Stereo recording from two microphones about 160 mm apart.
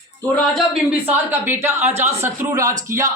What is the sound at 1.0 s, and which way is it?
A woman's voice, 10° right (ahead or behind).